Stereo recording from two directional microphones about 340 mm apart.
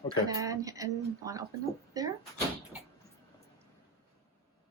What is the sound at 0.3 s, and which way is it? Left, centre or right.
A woman's voice, centre.